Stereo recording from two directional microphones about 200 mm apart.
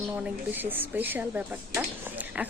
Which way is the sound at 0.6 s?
10° right (ahead or behind).